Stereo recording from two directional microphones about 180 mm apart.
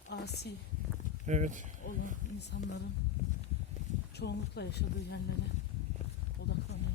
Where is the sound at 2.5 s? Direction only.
65° left (ahead or behind).